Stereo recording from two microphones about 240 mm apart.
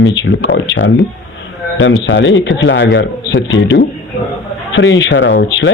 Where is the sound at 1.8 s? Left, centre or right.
Left.